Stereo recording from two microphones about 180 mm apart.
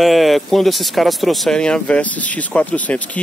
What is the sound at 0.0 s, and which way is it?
Speech, centre (ahead or behind).